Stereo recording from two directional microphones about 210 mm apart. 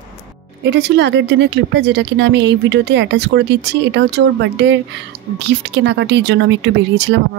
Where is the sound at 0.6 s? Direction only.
55° right (ahead or behind).